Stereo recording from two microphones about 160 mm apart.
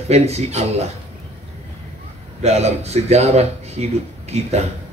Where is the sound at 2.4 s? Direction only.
40° right (ahead or behind).